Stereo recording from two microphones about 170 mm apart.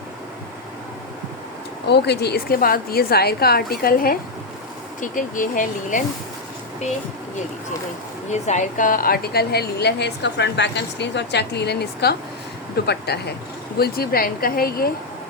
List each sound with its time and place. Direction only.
1.9 s a woman's voice: 80° left; by 6.0 s 50° left (ahead or behind)
8.3 s a woman's voice: 45° left (ahead or behind); by 14.9 s 60° left (ahead or behind)